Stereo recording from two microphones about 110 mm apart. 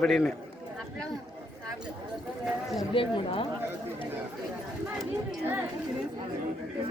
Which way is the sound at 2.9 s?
55° left (ahead or behind).